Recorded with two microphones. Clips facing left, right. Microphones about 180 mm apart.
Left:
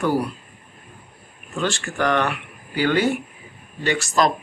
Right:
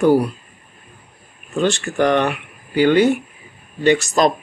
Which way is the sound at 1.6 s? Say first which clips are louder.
Right 5 dB; 20° right (ahead or behind).